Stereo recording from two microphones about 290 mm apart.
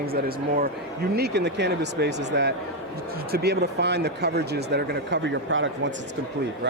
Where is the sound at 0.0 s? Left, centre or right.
Right.